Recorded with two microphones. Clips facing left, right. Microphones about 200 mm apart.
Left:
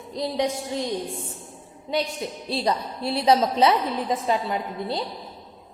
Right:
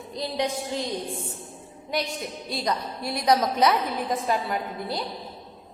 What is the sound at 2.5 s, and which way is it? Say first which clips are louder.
A woman's voice: left 3 dB; 30° left (ahead or behind).